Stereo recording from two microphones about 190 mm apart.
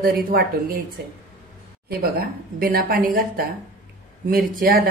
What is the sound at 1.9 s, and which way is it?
A woman's voice, 55° right (ahead or behind).